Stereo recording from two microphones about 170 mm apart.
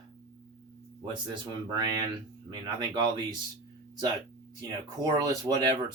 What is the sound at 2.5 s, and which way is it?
Speech, 25° right (ahead or behind).